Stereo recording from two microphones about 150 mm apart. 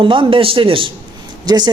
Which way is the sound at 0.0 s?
35° right (ahead or behind).